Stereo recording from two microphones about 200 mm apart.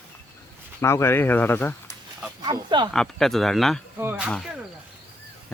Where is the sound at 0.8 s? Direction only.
15° left (ahead or behind).